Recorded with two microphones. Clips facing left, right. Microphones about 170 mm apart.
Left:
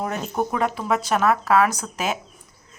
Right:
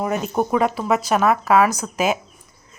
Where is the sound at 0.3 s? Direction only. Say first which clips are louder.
Right 4 dB; 10° right (ahead or behind).